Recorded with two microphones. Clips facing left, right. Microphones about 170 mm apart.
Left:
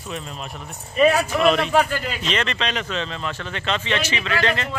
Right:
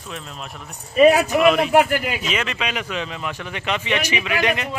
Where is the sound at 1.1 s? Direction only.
10° right (ahead or behind).